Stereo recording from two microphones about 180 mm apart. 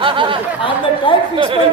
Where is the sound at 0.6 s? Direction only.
30° left (ahead or behind).